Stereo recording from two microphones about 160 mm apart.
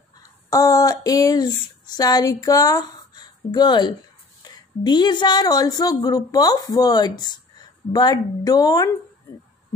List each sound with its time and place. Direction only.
0.2 s a woman's voice: 20° left (ahead or behind)